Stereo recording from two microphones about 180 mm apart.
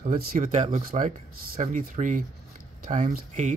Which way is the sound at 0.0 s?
50° right (ahead or behind).